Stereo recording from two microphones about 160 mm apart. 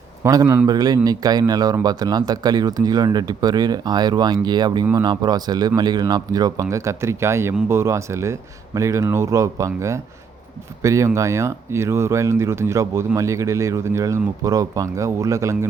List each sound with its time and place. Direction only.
0.2 s speech: 20° right (ahead or behind)
0.7 s speech: 25° right (ahead or behind)